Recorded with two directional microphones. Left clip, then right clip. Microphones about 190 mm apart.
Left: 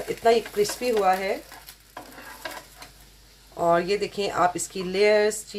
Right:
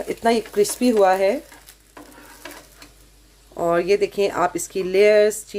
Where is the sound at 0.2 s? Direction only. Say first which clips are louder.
Right 2 dB; 45° right (ahead or behind).